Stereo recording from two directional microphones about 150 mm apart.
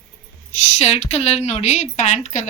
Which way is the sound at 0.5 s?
50° left (ahead or behind).